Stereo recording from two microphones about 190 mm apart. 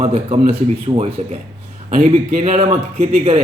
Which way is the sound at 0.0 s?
30° right (ahead or behind).